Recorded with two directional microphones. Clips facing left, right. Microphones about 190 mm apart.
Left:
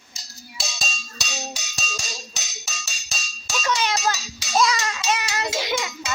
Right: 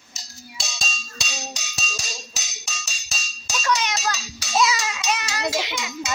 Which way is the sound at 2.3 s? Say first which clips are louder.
Even; centre (ahead or behind).